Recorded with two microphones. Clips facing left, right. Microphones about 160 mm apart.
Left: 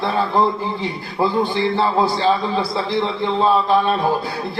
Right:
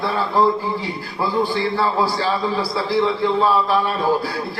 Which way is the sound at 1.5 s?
20° left (ahead or behind).